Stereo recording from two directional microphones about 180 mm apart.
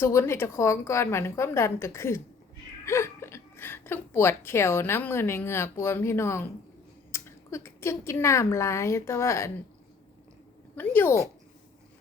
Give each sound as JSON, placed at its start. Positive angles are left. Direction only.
{"t": 0.0, "sound": "a woman's voice", "side_deg": 15}
{"t": 10.8, "sound": "a woman's voice", "side_deg": 10}